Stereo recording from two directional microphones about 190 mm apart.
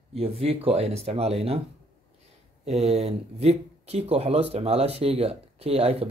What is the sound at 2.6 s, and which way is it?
Speech, 35° right (ahead or behind).